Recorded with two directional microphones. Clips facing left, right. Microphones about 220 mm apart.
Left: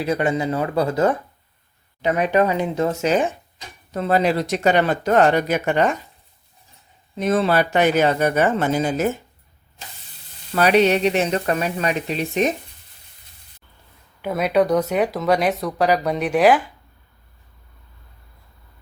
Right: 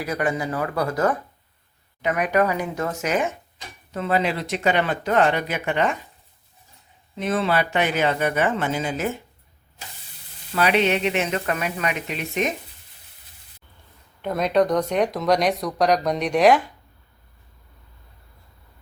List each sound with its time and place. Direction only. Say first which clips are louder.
0.0 s speech: left 4 dB; 25° left (ahead or behind); by 6.0 s 40° left (ahead or behind)
7.2 s speech: left 4 dB; 40° left (ahead or behind)
10.5 s speech: left 4 dB; 40° left (ahead or behind)
14.2 s speech: left 1 dB; 5° left (ahead or behind)